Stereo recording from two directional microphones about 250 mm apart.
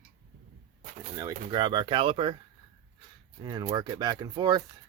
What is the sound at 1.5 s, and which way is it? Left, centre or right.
Speech, centre.